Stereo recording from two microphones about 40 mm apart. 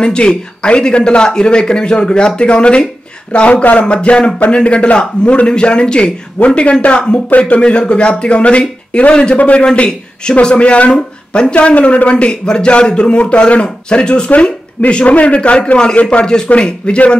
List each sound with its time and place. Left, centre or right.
0.0 s speech: left
6.4 s speech: left
15.5 s speech: left